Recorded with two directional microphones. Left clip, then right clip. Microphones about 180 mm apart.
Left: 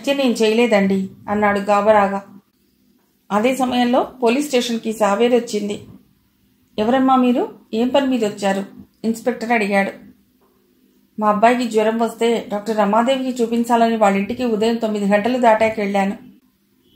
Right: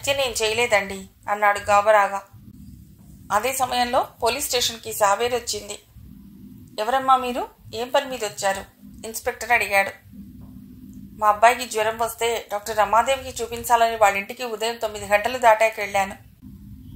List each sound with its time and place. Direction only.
0.0 s speech: 35° right (ahead or behind)
3.3 s speech: 35° right (ahead or behind)
11.1 s speech: 35° right (ahead or behind)